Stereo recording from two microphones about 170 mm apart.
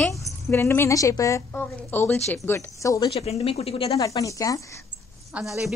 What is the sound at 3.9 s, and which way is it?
Speech, 20° left (ahead or behind).